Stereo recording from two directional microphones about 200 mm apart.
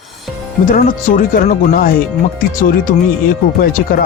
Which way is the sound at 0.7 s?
45° left (ahead or behind).